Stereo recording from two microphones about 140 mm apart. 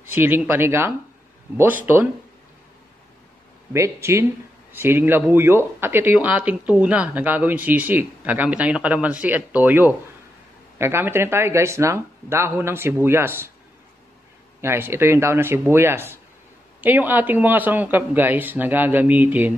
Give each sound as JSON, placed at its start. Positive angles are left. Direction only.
{"t": 0.1, "sound": "speech", "side_deg": -15}
{"t": 3.7, "sound": "speech", "side_deg": -20}
{"t": 14.6, "sound": "speech", "side_deg": -15}